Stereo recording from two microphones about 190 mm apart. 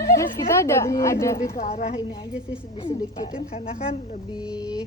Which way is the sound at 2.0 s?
25° left (ahead or behind).